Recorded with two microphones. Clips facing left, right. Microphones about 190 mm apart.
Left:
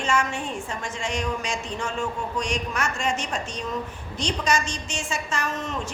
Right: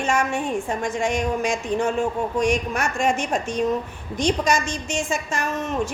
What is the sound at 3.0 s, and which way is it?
Speech, 55° right (ahead or behind).